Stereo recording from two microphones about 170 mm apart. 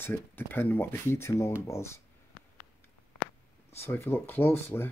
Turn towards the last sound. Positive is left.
turn(degrees=10)  # may be behind; listen again after turning